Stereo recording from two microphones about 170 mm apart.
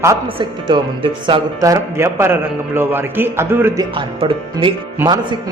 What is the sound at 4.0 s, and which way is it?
Speech, 30° right (ahead or behind).